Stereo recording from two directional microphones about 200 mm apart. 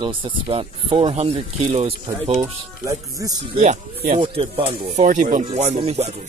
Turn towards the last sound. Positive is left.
turn(degrees=-30)  # may be behind; listen again after turning